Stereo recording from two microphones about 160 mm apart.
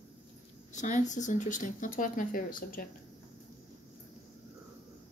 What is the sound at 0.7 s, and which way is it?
Speech, 50° left (ahead or behind).